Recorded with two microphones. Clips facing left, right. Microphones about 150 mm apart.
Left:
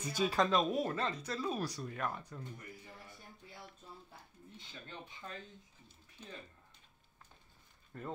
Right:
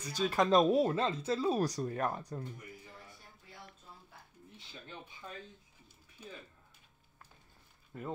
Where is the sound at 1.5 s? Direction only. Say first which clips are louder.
Right 7 dB; 40° right (ahead or behind).